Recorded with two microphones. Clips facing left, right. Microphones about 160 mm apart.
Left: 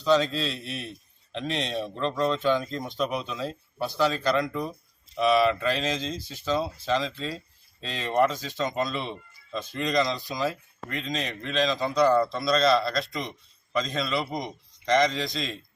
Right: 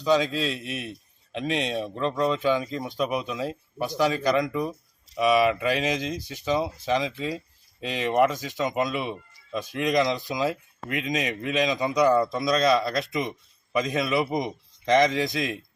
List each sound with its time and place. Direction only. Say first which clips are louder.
0.0 s a man's voice: even; 10° right (ahead or behind)